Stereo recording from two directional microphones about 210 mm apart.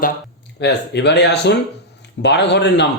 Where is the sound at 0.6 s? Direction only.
55° left (ahead or behind).